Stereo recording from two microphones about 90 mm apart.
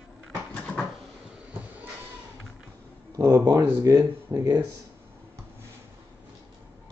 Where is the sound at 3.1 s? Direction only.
35° right (ahead or behind).